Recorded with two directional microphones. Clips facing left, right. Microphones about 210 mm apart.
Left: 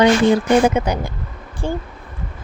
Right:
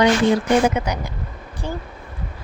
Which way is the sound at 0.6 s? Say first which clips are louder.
Left 3 dB; 30° left (ahead or behind).